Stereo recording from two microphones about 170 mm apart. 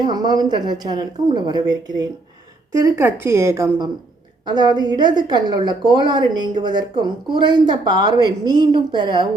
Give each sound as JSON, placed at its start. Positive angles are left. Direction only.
{"t": 0.0, "sound": "a woman's voice", "side_deg": -25}